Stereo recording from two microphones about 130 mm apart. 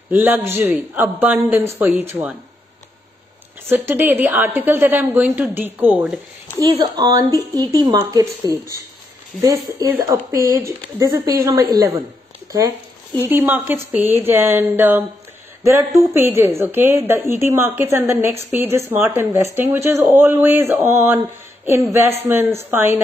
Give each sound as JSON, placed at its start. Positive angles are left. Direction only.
{"t": 0.1, "sound": "speech", "side_deg": -15}
{"t": 3.6, "sound": "speech", "side_deg": -15}
{"t": 6.6, "sound": "speech", "side_deg": -30}
{"t": 13.3, "sound": "speech", "side_deg": -15}
{"t": 22.3, "sound": "speech", "side_deg": -20}